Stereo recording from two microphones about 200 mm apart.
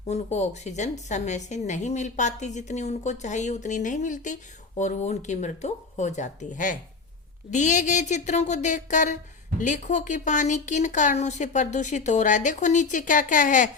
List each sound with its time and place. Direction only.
0.1 s a woman's voice: 35° left (ahead or behind)